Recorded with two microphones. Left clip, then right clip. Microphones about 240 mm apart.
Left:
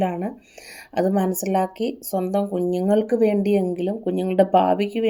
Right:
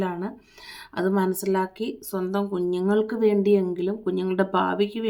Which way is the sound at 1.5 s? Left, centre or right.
Right.